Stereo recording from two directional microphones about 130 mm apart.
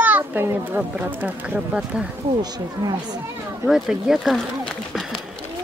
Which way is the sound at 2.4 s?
30° right (ahead or behind).